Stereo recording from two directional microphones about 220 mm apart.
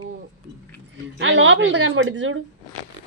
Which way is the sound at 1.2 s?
60° right (ahead or behind).